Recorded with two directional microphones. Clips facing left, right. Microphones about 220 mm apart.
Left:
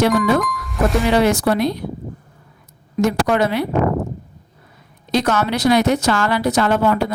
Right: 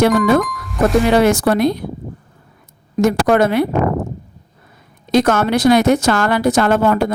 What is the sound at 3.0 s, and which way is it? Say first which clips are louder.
Speech: right 4 dB; 50° right (ahead or behind).